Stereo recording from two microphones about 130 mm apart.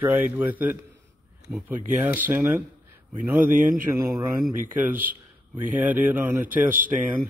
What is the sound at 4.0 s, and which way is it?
A man's voice, 20° right (ahead or behind).